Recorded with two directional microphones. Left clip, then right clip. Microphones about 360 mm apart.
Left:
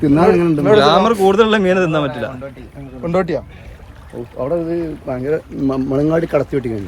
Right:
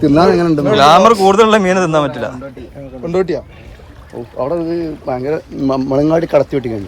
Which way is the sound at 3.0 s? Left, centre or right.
Centre.